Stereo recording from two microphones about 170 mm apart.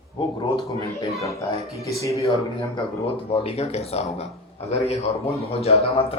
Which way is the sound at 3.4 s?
35° left (ahead or behind).